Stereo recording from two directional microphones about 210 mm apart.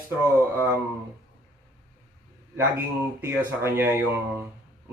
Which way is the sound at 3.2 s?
10° right (ahead or behind).